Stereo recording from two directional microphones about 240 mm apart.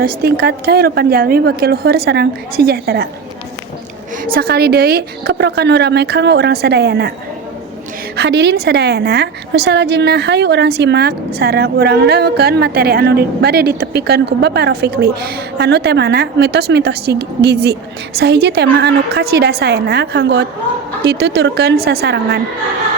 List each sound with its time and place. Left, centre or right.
0.2 s a woman's voice: right
4.4 s speech: right
8.1 s speech: right